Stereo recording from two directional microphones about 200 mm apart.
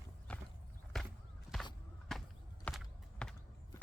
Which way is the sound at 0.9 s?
Centre (ahead or behind).